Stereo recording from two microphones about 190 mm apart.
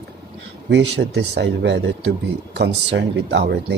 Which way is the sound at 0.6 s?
70° right (ahead or behind).